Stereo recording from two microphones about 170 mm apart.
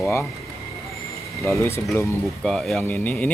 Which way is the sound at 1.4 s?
15° left (ahead or behind).